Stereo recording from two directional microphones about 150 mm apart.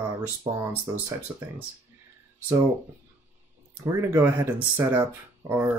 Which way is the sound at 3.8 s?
20° right (ahead or behind).